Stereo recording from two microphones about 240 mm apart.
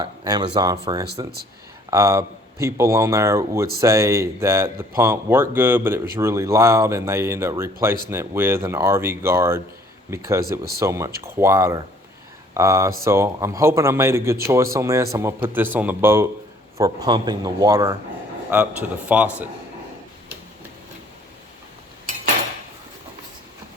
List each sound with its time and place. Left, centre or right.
0.0 s speech: centre